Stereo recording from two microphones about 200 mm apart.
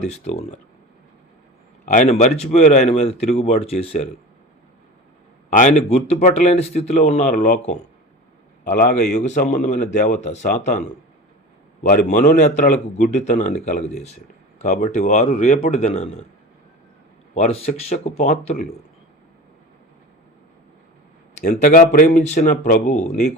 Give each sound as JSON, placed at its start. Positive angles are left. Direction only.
{"t": 0.1, "sound": "a man's voice", "side_deg": 35}
{"t": 1.8, "sound": "a man's voice", "side_deg": 40}
{"t": 5.5, "sound": "a man's voice", "side_deg": 35}
{"t": 9.2, "sound": "a man's voice", "side_deg": 40}
{"t": 17.3, "sound": "a man's voice", "side_deg": 35}
{"t": 21.6, "sound": "a man's voice", "side_deg": 45}